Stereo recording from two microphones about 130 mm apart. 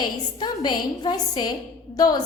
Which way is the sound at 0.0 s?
35° left (ahead or behind).